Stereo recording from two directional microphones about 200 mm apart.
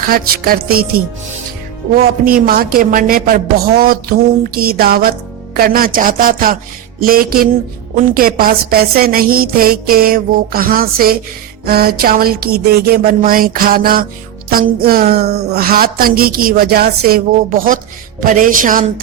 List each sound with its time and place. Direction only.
0.1 s a woman's voice: 45° right (ahead or behind)